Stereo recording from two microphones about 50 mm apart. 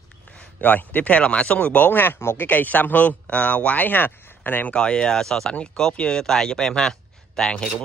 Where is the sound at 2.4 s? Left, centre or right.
Left.